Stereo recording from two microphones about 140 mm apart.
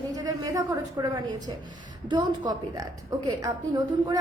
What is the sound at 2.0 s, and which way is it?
A woman's voice, 30° right (ahead or behind).